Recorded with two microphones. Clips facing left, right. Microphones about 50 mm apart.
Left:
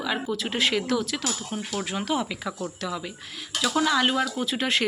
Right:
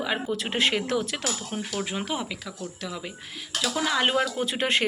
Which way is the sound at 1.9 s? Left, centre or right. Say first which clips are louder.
Left 7 dB; centre.